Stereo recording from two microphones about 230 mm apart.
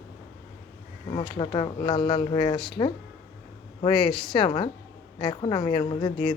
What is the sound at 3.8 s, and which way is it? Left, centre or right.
Speech, left.